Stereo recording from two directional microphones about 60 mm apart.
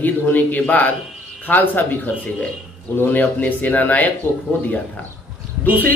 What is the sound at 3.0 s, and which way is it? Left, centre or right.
Speech, left.